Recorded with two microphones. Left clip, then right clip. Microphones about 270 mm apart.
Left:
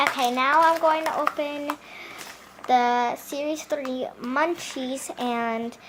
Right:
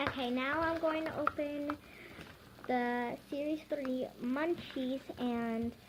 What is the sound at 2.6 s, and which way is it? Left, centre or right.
Speech, centre.